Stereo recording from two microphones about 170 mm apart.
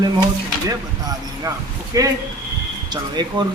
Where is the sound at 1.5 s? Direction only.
20° right (ahead or behind).